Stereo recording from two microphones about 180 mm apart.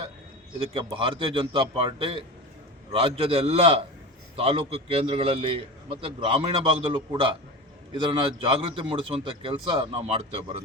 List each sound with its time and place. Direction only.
0.6 s a man's voice: 30° right (ahead or behind)